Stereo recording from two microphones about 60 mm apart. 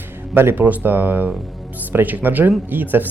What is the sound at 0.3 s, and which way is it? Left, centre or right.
A man's voice, right.